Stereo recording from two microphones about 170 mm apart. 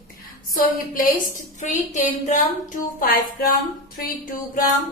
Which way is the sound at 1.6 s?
45° left (ahead or behind).